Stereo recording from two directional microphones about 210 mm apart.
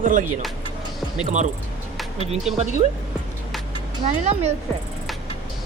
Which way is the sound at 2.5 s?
30° right (ahead or behind).